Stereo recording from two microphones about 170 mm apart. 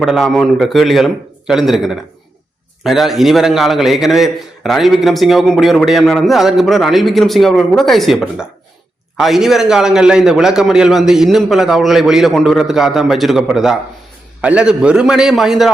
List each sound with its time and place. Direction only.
0.0 s a man's voice: centre (ahead or behind)